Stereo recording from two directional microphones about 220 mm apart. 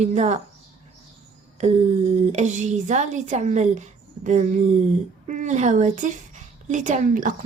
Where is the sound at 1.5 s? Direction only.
30° right (ahead or behind).